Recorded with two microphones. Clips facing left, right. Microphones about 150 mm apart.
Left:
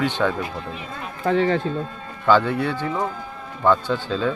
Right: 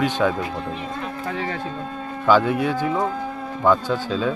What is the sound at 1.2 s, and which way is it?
Speech, 45° left (ahead or behind).